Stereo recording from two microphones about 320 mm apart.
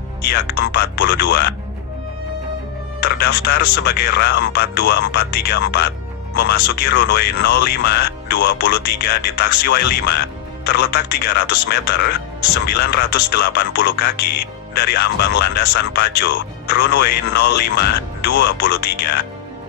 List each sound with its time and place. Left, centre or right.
0.6 s speech: left
3.0 s speech: left